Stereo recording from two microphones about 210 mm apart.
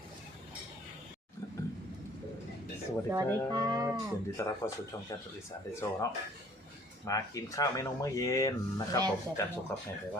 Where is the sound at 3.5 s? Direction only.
20° right (ahead or behind).